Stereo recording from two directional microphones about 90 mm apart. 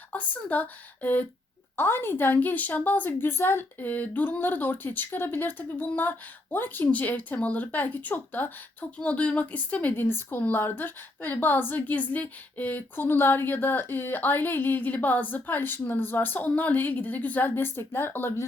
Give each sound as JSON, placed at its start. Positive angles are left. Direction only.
{"t": 0.1, "sound": "a woman's voice", "side_deg": 15}